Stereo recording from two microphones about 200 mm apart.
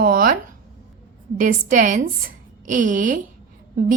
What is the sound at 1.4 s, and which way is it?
A woman's voice, 40° right (ahead or behind).